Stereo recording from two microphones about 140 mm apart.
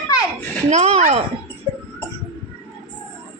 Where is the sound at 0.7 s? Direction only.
50° right (ahead or behind).